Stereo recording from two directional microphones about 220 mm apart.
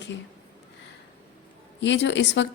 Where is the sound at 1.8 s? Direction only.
55° left (ahead or behind).